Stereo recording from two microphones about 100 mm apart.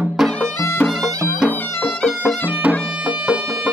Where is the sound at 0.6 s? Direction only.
25° left (ahead or behind).